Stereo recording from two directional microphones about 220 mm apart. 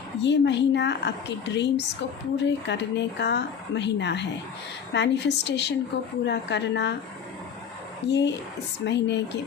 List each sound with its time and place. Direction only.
0.2 s speech: 55° left (ahead or behind)
8.0 s speech: 50° left (ahead or behind)